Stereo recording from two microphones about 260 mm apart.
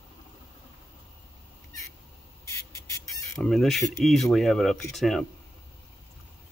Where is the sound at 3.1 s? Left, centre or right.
Centre.